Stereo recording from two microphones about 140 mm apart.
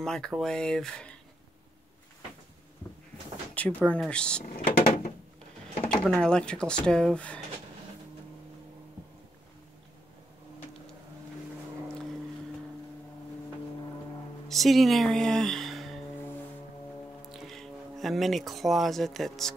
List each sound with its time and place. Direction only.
0.0 s speech: 5° left (ahead or behind)
3.5 s speech: 10° left (ahead or behind)
4.8 s a sound: 90° left
6.0 s speech: 5° left (ahead or behind)
14.5 s speech: centre (ahead or behind)
17.3 s speech: centre (ahead or behind)